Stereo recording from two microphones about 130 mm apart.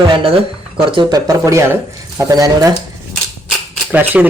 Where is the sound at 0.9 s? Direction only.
40° right (ahead or behind).